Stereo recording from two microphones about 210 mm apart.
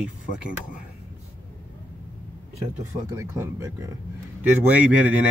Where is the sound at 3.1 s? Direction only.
15° right (ahead or behind).